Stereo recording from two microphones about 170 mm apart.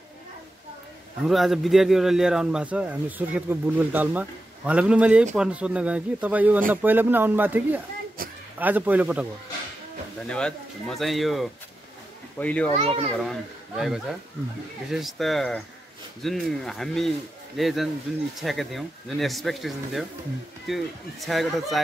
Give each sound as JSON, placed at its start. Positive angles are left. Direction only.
{"t": 1.2, "sound": "speech", "side_deg": 0}
{"t": 8.2, "sound": "a sound", "side_deg": -60}
{"t": 8.5, "sound": "speech", "side_deg": -10}
{"t": 10.2, "sound": "speech", "side_deg": 5}
{"t": 12.7, "sound": "a child's voice", "side_deg": -40}
{"t": 13.2, "sound": "speech", "side_deg": 0}